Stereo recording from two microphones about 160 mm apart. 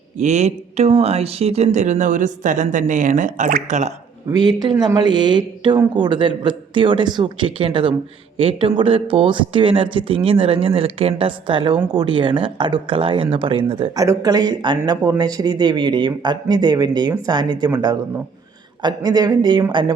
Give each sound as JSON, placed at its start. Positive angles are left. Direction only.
{"t": 0.2, "sound": "speech", "side_deg": -45}
{"t": 4.3, "sound": "speech", "side_deg": -25}
{"t": 14.0, "sound": "speech", "side_deg": -20}
{"t": 18.8, "sound": "speech", "side_deg": -25}